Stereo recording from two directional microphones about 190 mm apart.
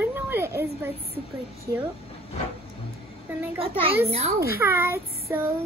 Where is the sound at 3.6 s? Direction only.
30° right (ahead or behind).